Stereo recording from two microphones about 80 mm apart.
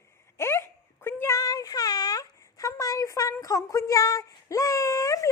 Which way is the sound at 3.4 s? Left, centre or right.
Left.